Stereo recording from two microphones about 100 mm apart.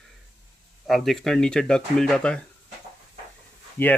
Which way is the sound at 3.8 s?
20° left (ahead or behind).